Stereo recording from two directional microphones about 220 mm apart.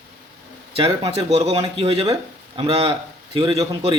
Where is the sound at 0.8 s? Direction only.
20° right (ahead or behind).